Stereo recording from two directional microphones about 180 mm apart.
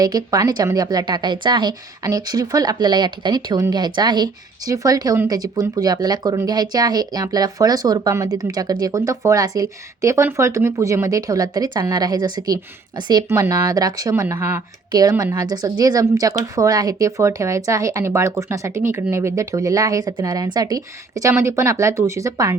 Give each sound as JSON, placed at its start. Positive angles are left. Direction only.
{"t": 0.0, "sound": "a woman's voice", "side_deg": -20}